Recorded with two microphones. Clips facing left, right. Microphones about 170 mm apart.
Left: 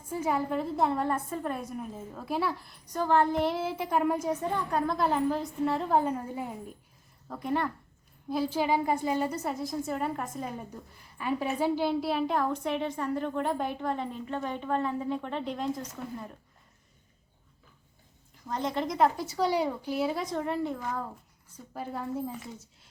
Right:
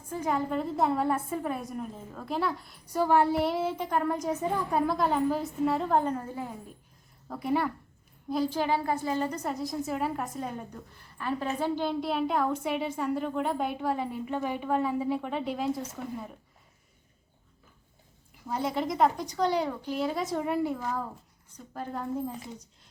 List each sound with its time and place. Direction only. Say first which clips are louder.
0.0 s a woman's voice: even; 10° left (ahead or behind)
4.3 s a woman's voice: right 1 dB; 5° right (ahead or behind); by 6.5 s 15° left (ahead or behind)
7.3 s a woman's voice: right 2 dB; 5° right (ahead or behind)
8.3 s a woman's voice: even; 5° left (ahead or behind)
18.4 s a woman's voice: right 1 dB; 5° right (ahead or behind)
21.5 s a woman's voice: right 1 dB; 10° left (ahead or behind)